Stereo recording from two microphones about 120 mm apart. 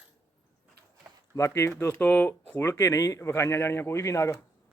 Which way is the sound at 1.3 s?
25° left (ahead or behind).